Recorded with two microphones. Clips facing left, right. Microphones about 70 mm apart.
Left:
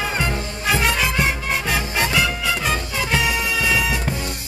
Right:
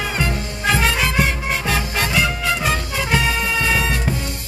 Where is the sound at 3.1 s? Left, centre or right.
Centre.